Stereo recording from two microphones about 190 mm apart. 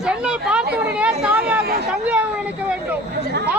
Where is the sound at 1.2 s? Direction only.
5° right (ahead or behind).